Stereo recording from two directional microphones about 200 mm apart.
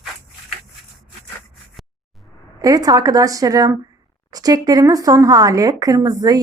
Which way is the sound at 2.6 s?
20° right (ahead or behind).